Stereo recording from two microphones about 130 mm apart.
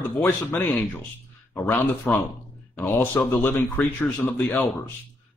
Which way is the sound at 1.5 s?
20° left (ahead or behind).